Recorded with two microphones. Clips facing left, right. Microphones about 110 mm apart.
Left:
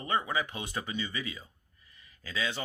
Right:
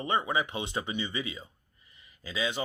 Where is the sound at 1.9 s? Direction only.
20° right (ahead or behind).